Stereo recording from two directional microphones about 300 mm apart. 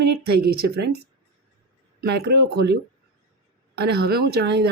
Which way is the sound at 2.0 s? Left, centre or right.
Right.